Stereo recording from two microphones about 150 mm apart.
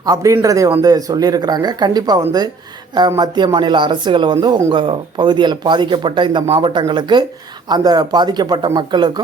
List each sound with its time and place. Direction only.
0.0 s a man's voice: 25° right (ahead or behind)